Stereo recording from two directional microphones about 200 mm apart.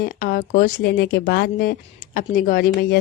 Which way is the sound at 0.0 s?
45° left (ahead or behind).